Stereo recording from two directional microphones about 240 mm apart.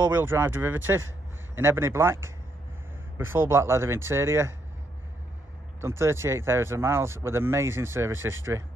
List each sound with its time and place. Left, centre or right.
0.1 s a man's voice: centre
5.8 s speech: centre